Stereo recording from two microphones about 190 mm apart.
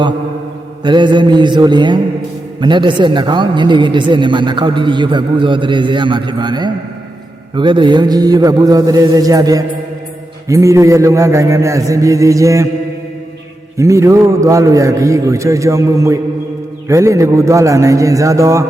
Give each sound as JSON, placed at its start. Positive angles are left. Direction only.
{"t": 0.9, "sound": "a woman's voice", "side_deg": -25}
{"t": 13.7, "sound": "a man's voice", "side_deg": -15}